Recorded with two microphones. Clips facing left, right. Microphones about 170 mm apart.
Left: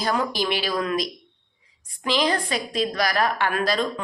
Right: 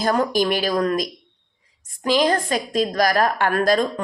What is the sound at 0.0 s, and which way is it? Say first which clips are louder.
A woman's voice: right 5 dB; 45° right (ahead or behind).